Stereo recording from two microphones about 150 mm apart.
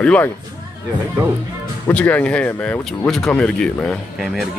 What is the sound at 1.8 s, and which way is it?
Speech, 10° left (ahead or behind).